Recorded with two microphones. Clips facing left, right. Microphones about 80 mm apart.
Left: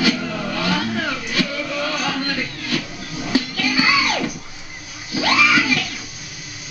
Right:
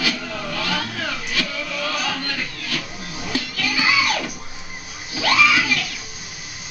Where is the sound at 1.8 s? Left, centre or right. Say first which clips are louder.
Left 1 dB; centre.